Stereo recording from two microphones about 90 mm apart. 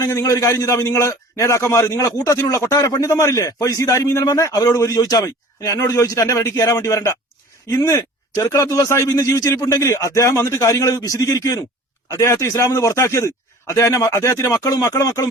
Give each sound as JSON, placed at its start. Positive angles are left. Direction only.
{"t": 0.0, "sound": "a man's voice", "side_deg": 35}